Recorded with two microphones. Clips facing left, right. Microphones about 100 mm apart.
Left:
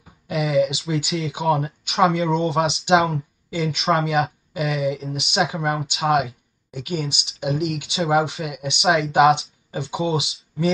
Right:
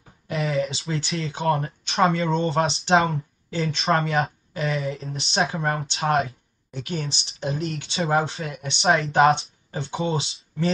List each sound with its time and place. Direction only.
0.3 s a sound: 5° left (ahead or behind)
0.8 s speech: 5° left (ahead or behind)
7.4 s speech: 35° right (ahead or behind)
8.0 s speech: 5° left (ahead or behind)
8.3 s speech: 35° right (ahead or behind)
8.5 s speech: 5° left (ahead or behind)